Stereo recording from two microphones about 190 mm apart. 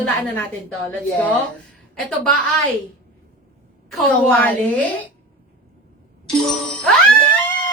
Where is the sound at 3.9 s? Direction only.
5° left (ahead or behind).